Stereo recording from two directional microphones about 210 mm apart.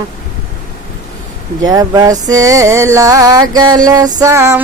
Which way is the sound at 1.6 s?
15° right (ahead or behind).